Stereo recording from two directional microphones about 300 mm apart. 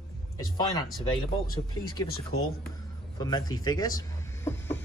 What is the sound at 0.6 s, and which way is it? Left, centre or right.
Speech, centre.